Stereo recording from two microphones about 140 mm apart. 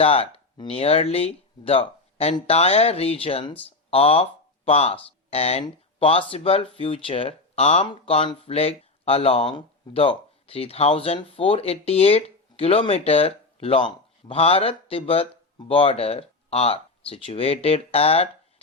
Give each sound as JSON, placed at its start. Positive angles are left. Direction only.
{"t": 0.0, "sound": "speech", "side_deg": 45}